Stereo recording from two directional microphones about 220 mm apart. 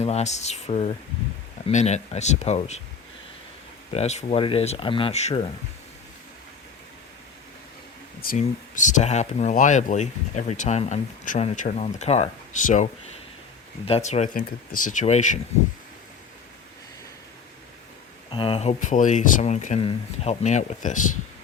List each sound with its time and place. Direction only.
0.0 s speech: 30° left (ahead or behind)
3.9 s speech: 30° left (ahead or behind)
8.2 s speech: 40° left (ahead or behind)
18.3 s speech: 25° left (ahead or behind)